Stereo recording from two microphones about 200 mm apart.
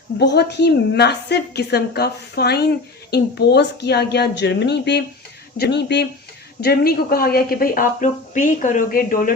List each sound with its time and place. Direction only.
0.2 s a woman's voice: 55° left (ahead or behind)